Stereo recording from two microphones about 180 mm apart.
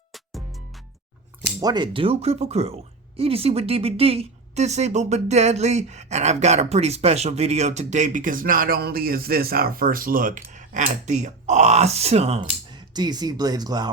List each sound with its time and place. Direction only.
1.6 s speech: 25° right (ahead or behind)